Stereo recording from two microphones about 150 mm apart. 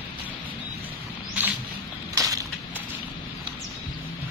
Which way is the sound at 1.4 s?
10° right (ahead or behind).